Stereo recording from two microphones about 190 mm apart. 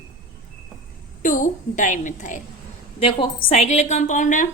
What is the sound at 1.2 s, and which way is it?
A woman's voice, 45° left (ahead or behind).